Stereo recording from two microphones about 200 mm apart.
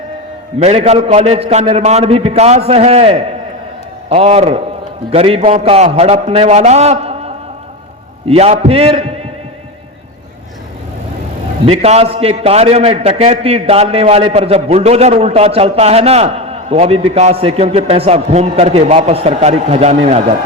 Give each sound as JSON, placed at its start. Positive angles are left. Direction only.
{"t": 0.6, "sound": "a man's voice", "side_deg": -30}
{"t": 11.6, "sound": "a man's voice", "side_deg": -30}